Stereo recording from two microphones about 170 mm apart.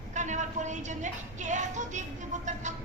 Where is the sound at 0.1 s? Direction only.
45° right (ahead or behind).